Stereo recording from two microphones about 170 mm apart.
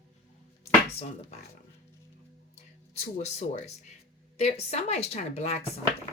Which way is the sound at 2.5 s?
40° left (ahead or behind).